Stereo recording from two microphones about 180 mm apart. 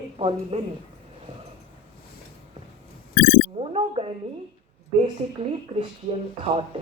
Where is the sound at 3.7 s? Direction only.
35° right (ahead or behind).